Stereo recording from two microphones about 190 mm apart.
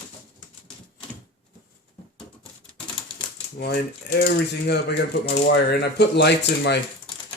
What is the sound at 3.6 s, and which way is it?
Speech, 60° left (ahead or behind).